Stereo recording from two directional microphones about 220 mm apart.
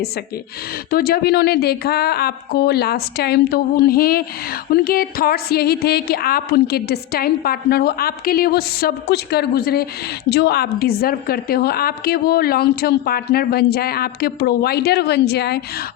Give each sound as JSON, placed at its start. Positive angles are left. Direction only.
{"t": 0.9, "sound": "a woman's voice", "side_deg": 45}